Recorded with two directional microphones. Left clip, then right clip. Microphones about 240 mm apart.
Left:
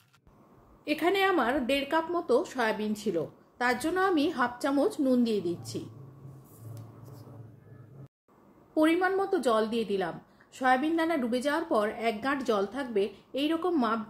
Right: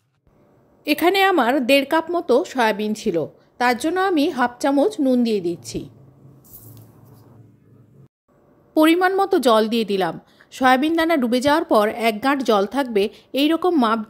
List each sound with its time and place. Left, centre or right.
0.8 s a woman's voice: right
8.7 s a woman's voice: right